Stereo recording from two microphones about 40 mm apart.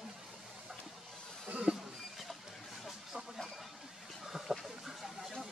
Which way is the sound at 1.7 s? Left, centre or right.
Centre.